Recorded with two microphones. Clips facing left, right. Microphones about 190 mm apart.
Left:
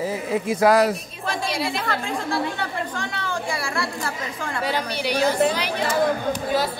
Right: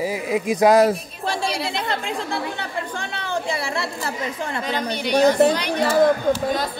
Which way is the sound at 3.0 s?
25° right (ahead or behind).